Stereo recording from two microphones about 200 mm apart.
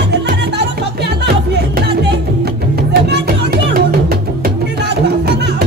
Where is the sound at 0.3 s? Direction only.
55° right (ahead or behind).